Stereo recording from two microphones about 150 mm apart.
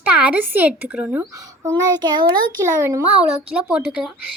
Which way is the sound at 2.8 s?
10° right (ahead or behind).